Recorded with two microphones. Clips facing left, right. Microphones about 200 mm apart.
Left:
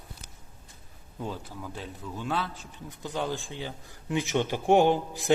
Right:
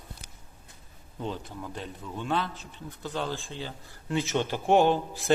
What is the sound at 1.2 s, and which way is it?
A man's voice, 5° left (ahead or behind).